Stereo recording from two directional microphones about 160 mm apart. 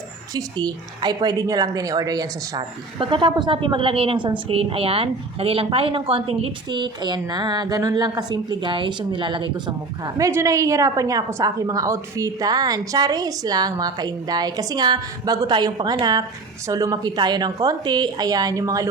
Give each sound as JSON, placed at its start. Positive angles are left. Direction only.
{"t": 0.3, "sound": "speech", "side_deg": -25}